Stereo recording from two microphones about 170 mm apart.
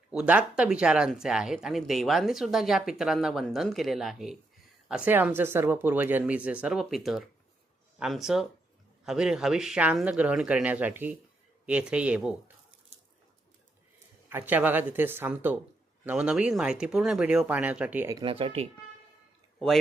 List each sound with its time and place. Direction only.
0.1 s speech: 5° right (ahead or behind)
14.3 s speech: 10° right (ahead or behind)
18.2 s speech: 35° right (ahead or behind)
19.5 s speech: centre (ahead or behind)